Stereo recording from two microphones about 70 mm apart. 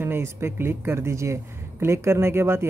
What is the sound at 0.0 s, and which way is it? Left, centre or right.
Speech, right.